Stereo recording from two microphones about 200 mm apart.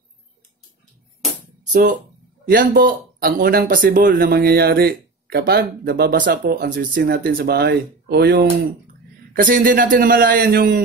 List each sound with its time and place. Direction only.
1.7 s speech: 40° right (ahead or behind)